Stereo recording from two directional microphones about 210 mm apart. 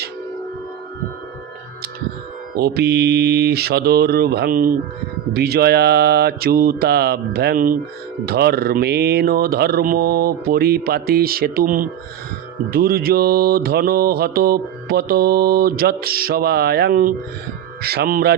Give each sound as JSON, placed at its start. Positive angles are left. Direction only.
{"t": 2.6, "sound": "mantra", "side_deg": -50}